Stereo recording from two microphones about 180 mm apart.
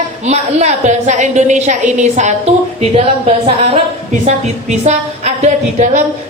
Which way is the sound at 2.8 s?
30° right (ahead or behind).